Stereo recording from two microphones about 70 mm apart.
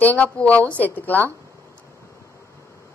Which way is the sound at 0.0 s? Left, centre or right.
Left.